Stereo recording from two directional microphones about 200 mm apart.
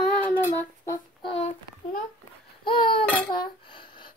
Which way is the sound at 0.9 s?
25° left (ahead or behind).